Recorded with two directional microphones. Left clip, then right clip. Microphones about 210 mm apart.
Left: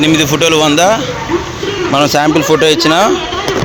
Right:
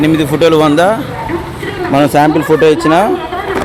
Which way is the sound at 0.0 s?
15° right (ahead or behind).